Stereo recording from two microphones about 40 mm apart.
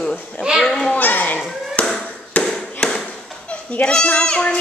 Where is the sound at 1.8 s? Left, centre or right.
Left.